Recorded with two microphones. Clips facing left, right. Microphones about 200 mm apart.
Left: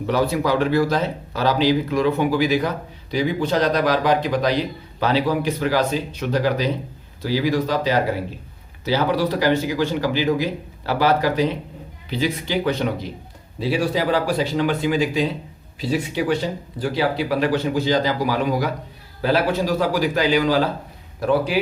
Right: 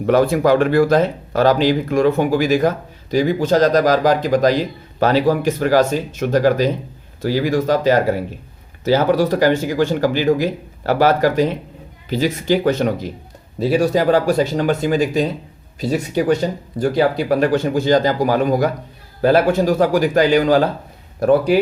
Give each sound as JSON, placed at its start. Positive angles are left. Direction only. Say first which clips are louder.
{"t": 0.0, "sound": "speech", "louder": "right 6 dB", "side_deg": -50}